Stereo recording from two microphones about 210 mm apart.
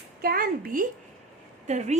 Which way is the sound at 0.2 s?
45° right (ahead or behind).